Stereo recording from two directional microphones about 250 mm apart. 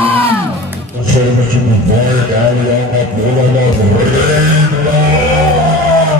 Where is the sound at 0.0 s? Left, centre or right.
Right.